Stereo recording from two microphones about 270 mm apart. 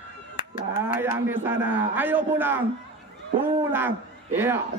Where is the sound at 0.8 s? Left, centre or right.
Centre.